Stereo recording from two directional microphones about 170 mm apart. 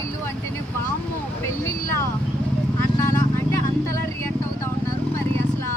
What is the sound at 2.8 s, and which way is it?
Vehicle, 20° left (ahead or behind).